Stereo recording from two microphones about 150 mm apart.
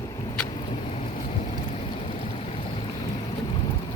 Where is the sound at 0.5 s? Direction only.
40° left (ahead or behind).